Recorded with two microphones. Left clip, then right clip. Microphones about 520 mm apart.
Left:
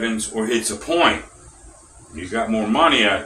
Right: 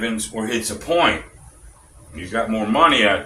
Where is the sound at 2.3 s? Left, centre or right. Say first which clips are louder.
Even; right.